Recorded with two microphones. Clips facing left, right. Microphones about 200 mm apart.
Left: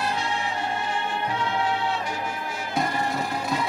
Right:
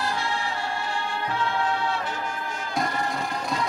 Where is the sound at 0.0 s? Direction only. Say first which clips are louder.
Left 1 dB; 20° left (ahead or behind).